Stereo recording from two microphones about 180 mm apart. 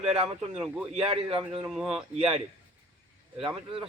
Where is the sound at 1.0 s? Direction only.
30° right (ahead or behind).